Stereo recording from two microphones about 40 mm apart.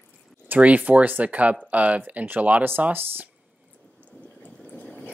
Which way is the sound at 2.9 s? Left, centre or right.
Right.